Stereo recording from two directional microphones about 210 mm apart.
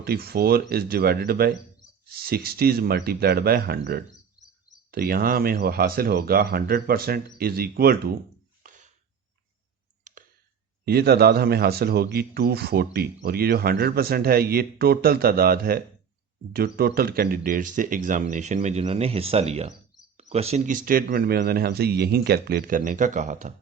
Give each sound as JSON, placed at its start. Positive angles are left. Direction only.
{"t": 0.0, "sound": "speech", "side_deg": -45}
{"t": 10.1, "sound": "clicking", "side_deg": -35}
{"t": 10.8, "sound": "speech", "side_deg": -50}